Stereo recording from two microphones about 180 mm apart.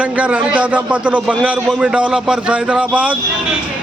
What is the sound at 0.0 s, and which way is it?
A man's voice, 5° right (ahead or behind).